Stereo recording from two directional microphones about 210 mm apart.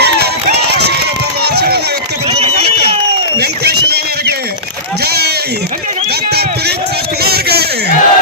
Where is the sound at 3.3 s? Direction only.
50° right (ahead or behind).